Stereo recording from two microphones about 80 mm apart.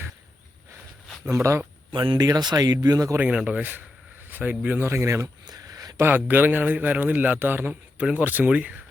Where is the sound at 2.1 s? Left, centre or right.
Right.